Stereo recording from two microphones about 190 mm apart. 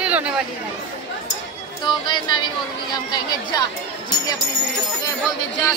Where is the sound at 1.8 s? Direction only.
20° left (ahead or behind).